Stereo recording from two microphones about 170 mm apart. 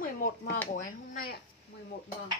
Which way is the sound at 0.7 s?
55° left (ahead or behind).